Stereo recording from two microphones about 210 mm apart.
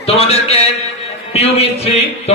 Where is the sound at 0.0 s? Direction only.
30° left (ahead or behind).